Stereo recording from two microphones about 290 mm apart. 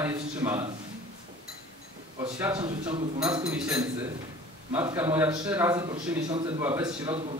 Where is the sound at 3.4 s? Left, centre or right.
Centre.